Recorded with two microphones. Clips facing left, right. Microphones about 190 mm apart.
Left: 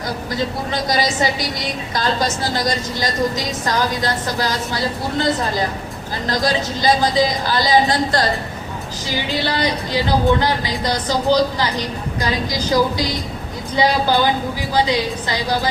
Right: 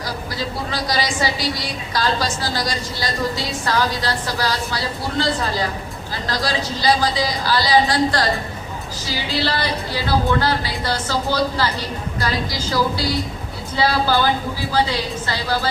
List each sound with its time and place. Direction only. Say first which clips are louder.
0.7 s a woman's voice: left 2 dB; 20° left (ahead or behind)
3.0 s a woman's voice: left 2 dB; 15° left (ahead or behind)